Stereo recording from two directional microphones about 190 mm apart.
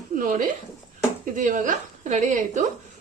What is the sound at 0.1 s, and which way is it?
A woman's voice, 45° right (ahead or behind).